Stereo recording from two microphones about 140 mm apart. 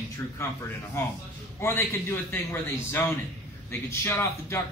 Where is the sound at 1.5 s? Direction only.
15° left (ahead or behind).